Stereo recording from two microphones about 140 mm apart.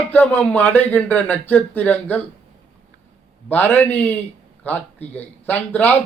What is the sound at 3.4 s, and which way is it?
Speech, 10° left (ahead or behind).